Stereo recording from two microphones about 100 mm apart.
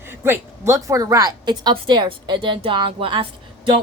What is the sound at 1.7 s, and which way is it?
A woman's voice, 55° right (ahead or behind).